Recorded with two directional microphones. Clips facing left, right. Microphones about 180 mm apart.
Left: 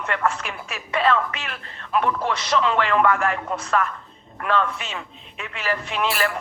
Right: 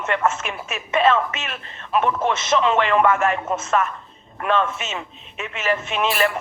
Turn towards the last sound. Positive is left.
turn(degrees=-20)  # may be behind; listen again after turning